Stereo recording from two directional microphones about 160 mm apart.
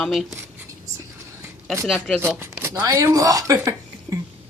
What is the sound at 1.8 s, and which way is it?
Speech, centre (ahead or behind).